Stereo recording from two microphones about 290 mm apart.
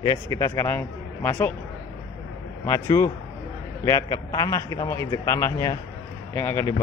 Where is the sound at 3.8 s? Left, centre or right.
Centre.